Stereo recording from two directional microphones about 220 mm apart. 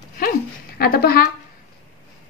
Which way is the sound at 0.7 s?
45° left (ahead or behind).